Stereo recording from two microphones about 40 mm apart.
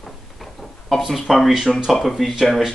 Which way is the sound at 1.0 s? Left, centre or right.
Centre.